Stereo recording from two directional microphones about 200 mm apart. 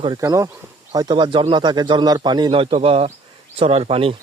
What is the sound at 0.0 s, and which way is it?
Speech, 20° right (ahead or behind).